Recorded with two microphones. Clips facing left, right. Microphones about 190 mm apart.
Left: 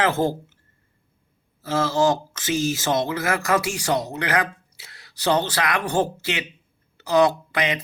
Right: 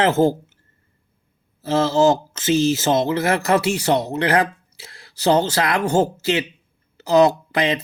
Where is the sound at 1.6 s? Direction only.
25° right (ahead or behind).